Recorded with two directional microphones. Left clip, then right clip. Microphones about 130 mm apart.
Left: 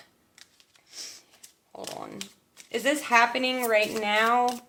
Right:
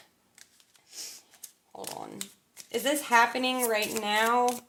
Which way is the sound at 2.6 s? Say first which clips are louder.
Left 2 dB; 30° left (ahead or behind).